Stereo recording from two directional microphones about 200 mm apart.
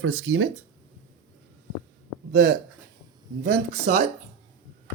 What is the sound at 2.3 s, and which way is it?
Speech, 55° right (ahead or behind).